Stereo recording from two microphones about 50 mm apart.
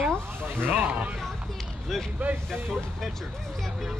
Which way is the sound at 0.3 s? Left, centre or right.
Right.